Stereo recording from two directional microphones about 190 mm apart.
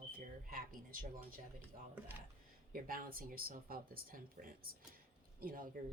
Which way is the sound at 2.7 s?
50° right (ahead or behind).